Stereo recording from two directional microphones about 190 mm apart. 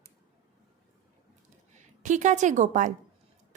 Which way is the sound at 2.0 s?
40° right (ahead or behind).